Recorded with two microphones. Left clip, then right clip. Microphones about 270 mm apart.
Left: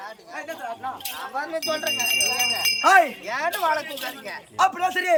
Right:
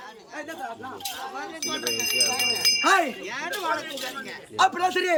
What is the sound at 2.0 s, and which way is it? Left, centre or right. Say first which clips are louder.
A man's voice: left 1 dB; centre.